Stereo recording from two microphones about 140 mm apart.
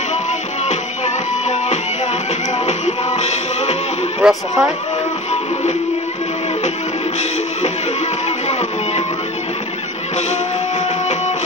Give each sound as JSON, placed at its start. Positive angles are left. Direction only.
{"t": 0.7, "sound": "music", "side_deg": 55}
{"t": 4.2, "sound": "speech", "side_deg": -5}
{"t": 8.5, "sound": "music", "side_deg": 50}